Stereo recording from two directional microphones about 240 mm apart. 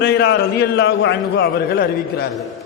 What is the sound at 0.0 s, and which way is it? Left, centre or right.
A man's voice, left.